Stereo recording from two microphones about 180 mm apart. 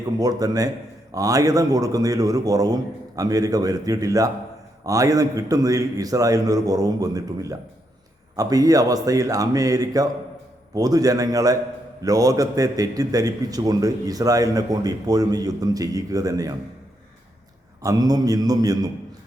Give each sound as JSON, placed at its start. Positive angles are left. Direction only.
{"t": 0.2, "sound": "a man's voice", "side_deg": -20}
{"t": 17.8, "sound": "a man's voice", "side_deg": -20}